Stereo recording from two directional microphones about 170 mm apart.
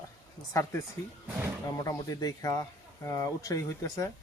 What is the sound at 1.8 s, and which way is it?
Speech, 20° left (ahead or behind).